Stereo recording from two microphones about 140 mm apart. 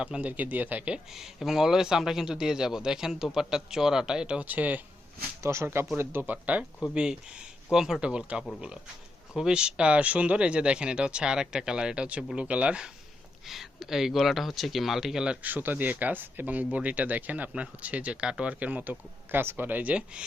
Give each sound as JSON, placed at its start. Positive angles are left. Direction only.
{"t": 0.0, "sound": "speech", "side_deg": -10}